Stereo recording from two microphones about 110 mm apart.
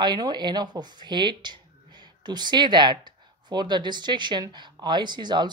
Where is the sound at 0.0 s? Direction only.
40° right (ahead or behind).